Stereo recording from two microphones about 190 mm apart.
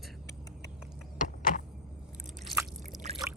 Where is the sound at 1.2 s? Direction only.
45° left (ahead or behind).